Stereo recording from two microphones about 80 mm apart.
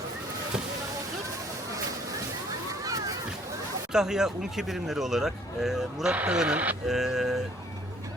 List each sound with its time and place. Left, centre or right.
2.8 s a sound: right
3.9 s speech: centre
6.8 s speech: centre